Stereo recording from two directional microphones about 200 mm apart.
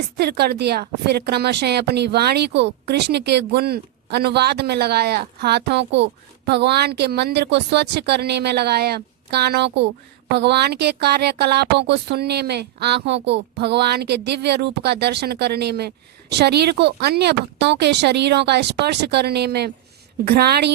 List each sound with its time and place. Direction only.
0.2 s a woman's voice: 55° right (ahead or behind)